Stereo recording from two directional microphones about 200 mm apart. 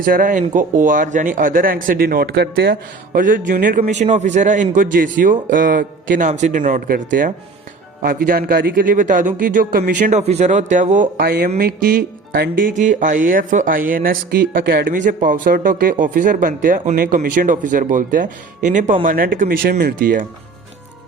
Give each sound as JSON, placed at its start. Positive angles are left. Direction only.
{"t": 0.0, "sound": "speech", "side_deg": -45}
{"t": 3.1, "sound": "a man's voice", "side_deg": -40}